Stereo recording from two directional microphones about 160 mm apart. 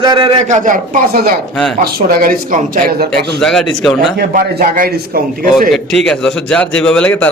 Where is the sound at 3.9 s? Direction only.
65° right (ahead or behind).